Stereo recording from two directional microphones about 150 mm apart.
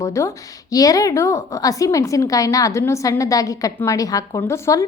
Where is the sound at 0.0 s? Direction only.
20° left (ahead or behind).